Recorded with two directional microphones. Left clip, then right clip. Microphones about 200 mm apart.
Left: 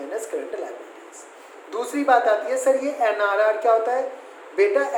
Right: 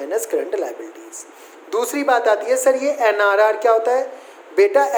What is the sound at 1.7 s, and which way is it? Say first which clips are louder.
A woman's voice: right 2 dB; 50° right (ahead or behind).